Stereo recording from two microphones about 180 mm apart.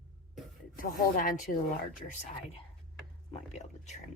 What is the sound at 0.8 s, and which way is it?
Speech, 50° left (ahead or behind).